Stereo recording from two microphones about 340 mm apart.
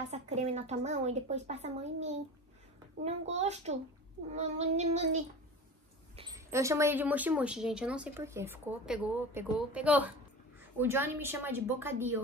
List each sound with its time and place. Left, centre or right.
0.1 s a woman's voice: centre